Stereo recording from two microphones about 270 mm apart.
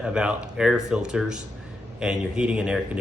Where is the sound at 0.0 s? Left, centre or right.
Centre.